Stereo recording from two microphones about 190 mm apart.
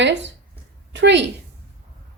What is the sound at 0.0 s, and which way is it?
A woman's voice, 70° right (ahead or behind).